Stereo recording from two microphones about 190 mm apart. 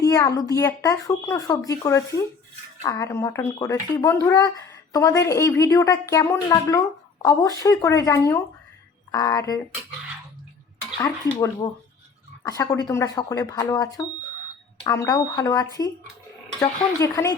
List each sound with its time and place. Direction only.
0.0 s speech: 20° left (ahead or behind)
10.9 s speech: 20° left (ahead or behind)